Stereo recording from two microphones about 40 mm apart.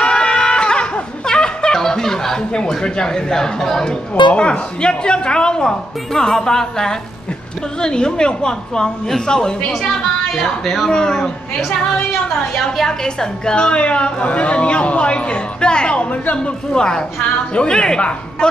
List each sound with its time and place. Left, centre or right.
0.0 s music: centre
1.8 s speech: centre
4.1 s speech: left
4.5 s a woman's voice: left
12.7 s a woman's voice: centre; by 16.5 s left
16.7 s a woman's voice: centre